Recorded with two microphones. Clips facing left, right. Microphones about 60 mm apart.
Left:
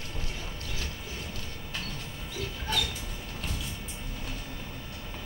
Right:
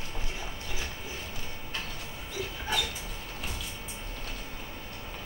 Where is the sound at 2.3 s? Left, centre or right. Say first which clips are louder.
Even; centre.